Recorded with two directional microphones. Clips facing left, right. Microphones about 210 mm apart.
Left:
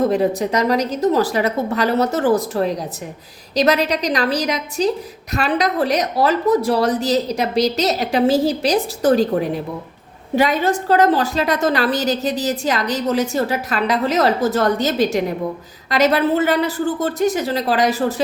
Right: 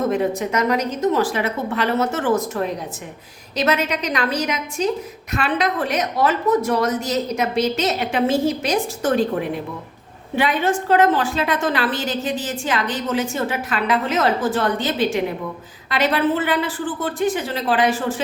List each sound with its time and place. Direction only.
0.1 s a woman's voice: 35° left (ahead or behind)